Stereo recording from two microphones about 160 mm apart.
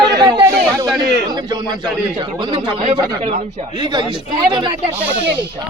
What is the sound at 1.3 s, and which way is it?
A man's voice, 25° right (ahead or behind).